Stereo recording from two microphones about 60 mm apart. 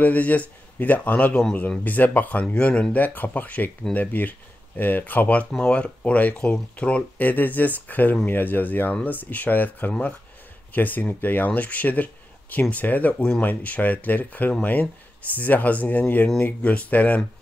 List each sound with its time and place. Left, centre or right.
0.0 s speech: left
2.4 s speech: centre
2.9 s speech: left